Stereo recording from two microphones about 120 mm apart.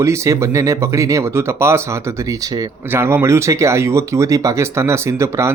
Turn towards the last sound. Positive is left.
turn(degrees=-25)  # may be behind; listen again after turning